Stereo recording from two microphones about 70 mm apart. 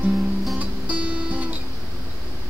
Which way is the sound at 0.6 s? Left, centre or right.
Right.